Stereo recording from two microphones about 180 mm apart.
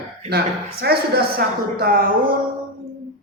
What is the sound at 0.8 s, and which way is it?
A man's voice, 60° right (ahead or behind).